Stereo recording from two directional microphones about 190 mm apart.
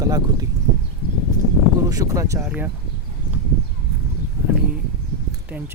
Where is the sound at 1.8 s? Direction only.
20° right (ahead or behind).